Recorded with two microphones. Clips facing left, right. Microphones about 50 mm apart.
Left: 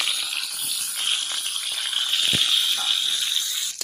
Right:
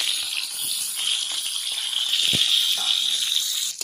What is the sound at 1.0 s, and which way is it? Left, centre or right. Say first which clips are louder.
Water: left 1 dB; left.